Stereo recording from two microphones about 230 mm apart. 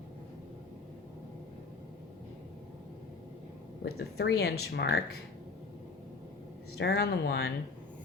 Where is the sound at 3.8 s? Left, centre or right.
Left.